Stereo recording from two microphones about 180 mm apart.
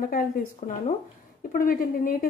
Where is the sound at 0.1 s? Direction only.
50° left (ahead or behind).